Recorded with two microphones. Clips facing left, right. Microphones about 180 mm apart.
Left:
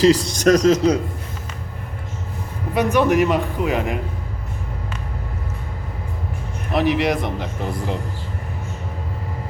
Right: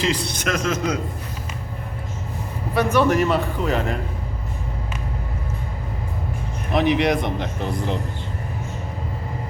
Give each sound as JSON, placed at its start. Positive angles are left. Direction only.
{"t": 0.0, "sound": "speech", "side_deg": 40}
{"t": 2.7, "sound": "a man's voice", "side_deg": 15}
{"t": 6.7, "sound": "speech", "side_deg": 5}